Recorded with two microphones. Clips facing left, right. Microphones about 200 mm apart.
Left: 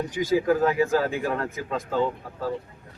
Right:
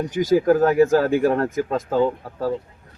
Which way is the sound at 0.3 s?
45° right (ahead or behind).